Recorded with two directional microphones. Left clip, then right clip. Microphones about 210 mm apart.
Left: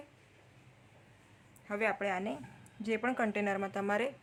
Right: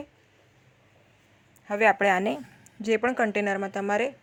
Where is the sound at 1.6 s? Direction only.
30° right (ahead or behind).